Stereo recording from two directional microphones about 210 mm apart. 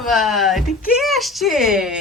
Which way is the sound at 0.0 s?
Centre (ahead or behind).